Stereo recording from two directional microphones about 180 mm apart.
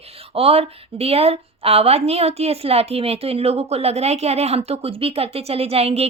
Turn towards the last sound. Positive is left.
turn(degrees=-35)  # may be behind; listen again after turning